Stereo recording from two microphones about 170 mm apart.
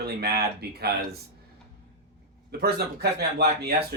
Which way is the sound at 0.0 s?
70° right (ahead or behind).